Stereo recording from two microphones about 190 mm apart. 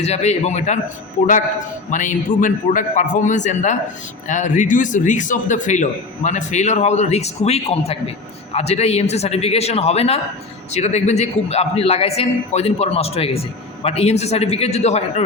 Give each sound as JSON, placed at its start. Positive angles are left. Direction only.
{"t": 0.0, "sound": "a man's voice", "side_deg": 35}
{"t": 1.9, "sound": "a man's voice", "side_deg": 40}